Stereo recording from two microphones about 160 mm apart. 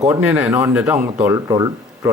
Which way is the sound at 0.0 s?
10° right (ahead or behind).